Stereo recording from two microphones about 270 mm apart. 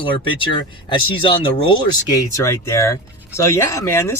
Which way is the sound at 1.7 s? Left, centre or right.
Centre.